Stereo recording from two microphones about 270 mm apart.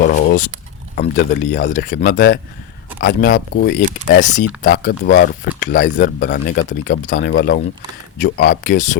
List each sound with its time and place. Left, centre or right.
0.0 s a sound: left
0.9 s speech: left
8.6 s speech: left